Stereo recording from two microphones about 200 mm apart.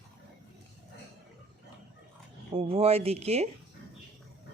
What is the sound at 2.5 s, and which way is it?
Speech, 30° right (ahead or behind).